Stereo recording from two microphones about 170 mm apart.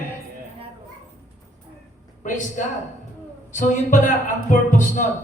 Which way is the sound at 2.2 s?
50° left (ahead or behind).